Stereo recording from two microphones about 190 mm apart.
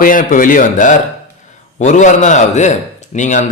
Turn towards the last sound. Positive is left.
turn(degrees=40)  # may be behind; listen again after turning